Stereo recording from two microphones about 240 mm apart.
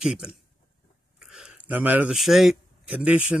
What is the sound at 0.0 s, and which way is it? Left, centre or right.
Speech, centre.